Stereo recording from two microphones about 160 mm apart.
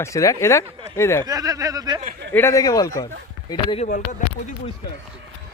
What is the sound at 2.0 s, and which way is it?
Speech, 60° right (ahead or behind).